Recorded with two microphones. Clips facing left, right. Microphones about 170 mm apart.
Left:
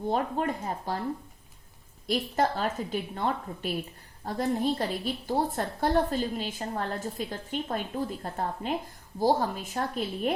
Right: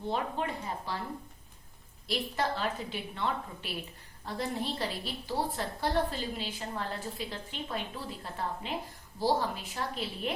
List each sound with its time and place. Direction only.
0.1 s a woman's voice: 45° left (ahead or behind)
2.0 s a woman's voice: 45° left (ahead or behind)